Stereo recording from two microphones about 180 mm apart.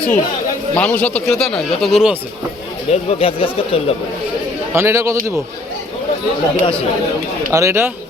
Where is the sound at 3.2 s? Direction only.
30° left (ahead or behind).